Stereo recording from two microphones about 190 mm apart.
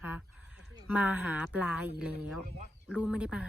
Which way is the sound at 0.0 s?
10° right (ahead or behind).